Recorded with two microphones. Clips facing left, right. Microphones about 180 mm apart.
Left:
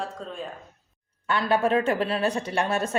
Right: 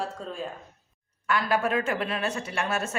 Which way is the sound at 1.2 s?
30° left (ahead or behind).